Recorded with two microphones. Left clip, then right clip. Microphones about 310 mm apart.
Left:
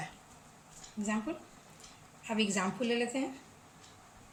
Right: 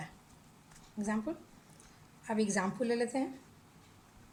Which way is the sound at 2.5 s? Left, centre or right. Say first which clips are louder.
Even; right.